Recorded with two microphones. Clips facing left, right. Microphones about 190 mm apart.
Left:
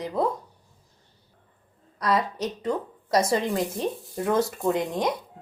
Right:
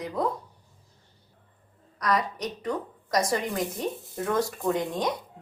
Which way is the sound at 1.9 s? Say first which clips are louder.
Left 2 dB; 25° left (ahead or behind).